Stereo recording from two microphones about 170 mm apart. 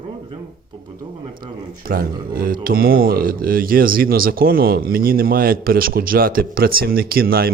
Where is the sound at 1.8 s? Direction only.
60° right (ahead or behind).